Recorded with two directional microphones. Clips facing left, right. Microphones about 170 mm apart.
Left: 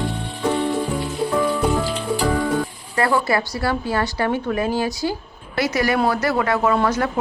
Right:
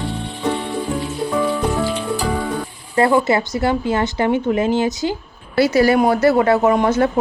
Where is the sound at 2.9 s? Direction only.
25° right (ahead or behind).